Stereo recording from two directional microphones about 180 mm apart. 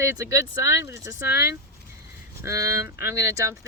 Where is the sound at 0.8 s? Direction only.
15° right (ahead or behind).